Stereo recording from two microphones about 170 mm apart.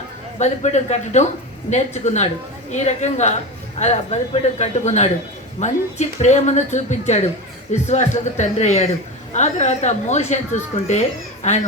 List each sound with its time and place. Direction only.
0.3 s a woman's voice: 40° left (ahead or behind)